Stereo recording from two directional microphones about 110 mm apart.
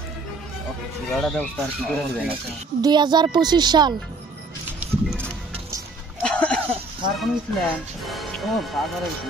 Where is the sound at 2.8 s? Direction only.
40° right (ahead or behind).